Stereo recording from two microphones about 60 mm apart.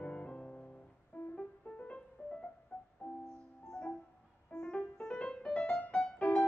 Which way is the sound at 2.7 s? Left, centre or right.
Left.